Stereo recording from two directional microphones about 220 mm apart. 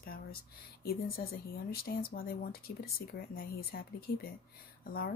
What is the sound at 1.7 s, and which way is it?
Speech, 45° left (ahead or behind).